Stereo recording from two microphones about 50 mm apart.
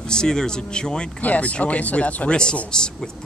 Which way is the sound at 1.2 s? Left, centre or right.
Left.